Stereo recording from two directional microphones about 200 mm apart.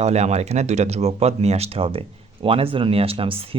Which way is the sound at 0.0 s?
35° right (ahead or behind).